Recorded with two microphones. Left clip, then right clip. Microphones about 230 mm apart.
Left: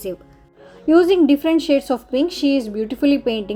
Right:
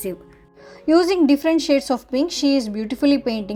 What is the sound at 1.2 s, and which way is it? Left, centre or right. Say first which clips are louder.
Speech: left 1 dB; right.